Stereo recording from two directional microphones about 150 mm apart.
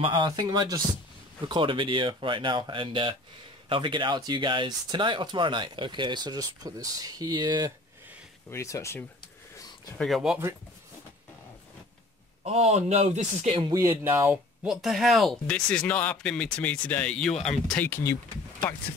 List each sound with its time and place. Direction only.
0.0 s speech: 30° right (ahead or behind)
8.5 s speech: 20° left (ahead or behind)
9.9 s speech: centre (ahead or behind)
12.4 s speech: 45° right (ahead or behind)
13.6 s speech: 25° right (ahead or behind)
14.0 s speech: 15° right (ahead or behind); by 17.8 s 5° left (ahead or behind)
17.8 s speech: 15° left (ahead or behind)